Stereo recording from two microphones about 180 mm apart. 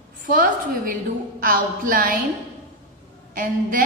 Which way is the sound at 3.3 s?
50° right (ahead or behind).